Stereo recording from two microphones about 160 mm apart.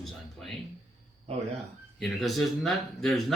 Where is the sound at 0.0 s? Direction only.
5° left (ahead or behind).